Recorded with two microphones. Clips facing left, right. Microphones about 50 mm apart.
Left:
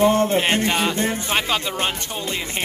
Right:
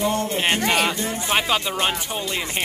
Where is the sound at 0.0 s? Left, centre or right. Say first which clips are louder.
Left 5 dB; left.